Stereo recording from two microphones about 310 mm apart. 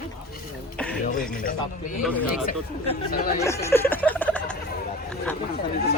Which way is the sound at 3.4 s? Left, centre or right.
Centre.